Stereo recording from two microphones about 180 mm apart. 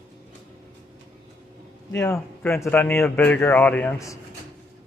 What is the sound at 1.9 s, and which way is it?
A man's voice, 15° left (ahead or behind).